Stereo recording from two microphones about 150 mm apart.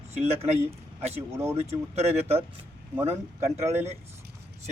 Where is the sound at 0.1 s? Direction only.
45° right (ahead or behind).